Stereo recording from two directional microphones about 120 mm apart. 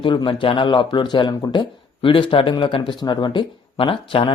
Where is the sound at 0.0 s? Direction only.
45° left (ahead or behind).